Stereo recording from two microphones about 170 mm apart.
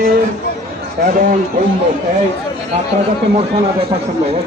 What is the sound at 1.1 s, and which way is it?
Speech, 55° right (ahead or behind).